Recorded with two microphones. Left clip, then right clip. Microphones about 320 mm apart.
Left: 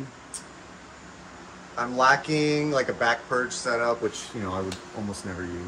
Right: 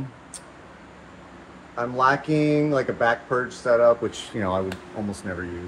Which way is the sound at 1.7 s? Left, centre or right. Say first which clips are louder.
Even; centre.